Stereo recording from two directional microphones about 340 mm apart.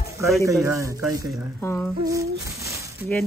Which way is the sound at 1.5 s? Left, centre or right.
Centre.